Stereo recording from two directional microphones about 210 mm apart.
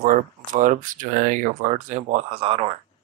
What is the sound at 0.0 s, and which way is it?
Speech, 40° right (ahead or behind).